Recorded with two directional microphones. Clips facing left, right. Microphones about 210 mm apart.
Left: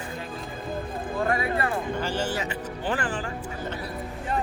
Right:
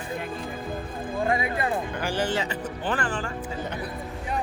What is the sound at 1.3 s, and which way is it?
Speech, 20° right (ahead or behind).